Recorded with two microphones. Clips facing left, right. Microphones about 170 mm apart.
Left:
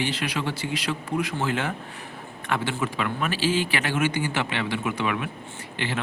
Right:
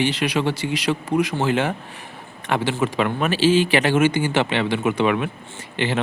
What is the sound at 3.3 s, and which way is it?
Speech, 90° right.